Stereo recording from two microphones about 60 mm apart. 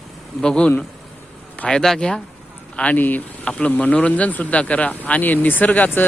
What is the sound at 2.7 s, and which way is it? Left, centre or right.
Speech, left.